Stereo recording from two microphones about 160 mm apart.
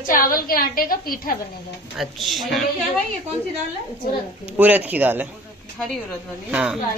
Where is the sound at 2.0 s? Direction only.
Centre (ahead or behind).